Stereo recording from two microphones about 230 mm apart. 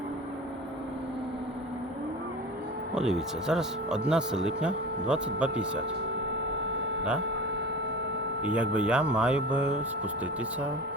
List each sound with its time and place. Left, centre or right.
2.9 s speech: centre
6.7 s a sound: right
8.4 s speech: centre